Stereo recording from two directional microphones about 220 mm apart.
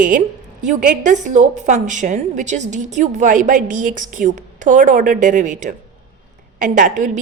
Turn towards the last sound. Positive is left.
turn(degrees=-35)  # may be behind; listen again after turning